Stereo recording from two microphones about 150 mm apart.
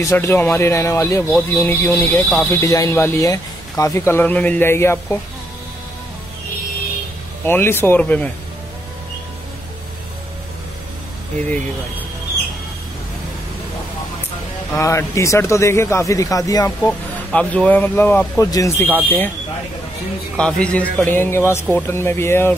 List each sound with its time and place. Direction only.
0.0 s speech: 20° left (ahead or behind)
7.4 s speech: 15° left (ahead or behind)
14.7 s speech: 20° left (ahead or behind)
16.8 s speech: 10° left (ahead or behind)
18.4 s speech: 20° left (ahead or behind)
20.3 s speech: 5° left (ahead or behind)